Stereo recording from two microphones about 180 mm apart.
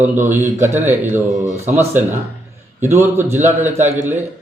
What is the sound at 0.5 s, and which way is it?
Speech, 40° right (ahead or behind).